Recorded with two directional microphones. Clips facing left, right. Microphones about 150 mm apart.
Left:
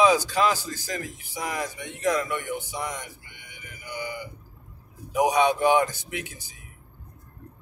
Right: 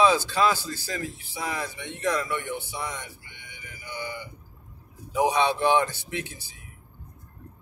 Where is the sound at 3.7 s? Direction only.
15° left (ahead or behind).